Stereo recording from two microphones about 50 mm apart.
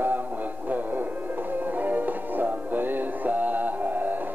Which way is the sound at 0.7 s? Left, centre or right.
Right.